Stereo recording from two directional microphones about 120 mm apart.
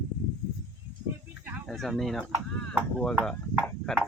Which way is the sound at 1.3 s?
15° right (ahead or behind).